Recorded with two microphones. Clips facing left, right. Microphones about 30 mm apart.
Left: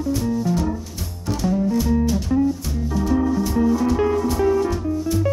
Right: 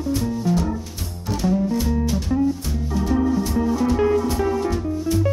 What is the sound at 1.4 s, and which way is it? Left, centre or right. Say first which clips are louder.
Music: left 1 dB; centre.